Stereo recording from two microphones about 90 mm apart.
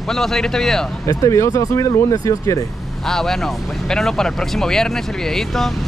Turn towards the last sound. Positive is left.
turn(degrees=5)  # may be behind; listen again after turning